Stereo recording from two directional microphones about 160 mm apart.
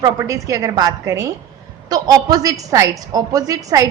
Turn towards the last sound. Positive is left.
turn(degrees=-20)  # may be behind; listen again after turning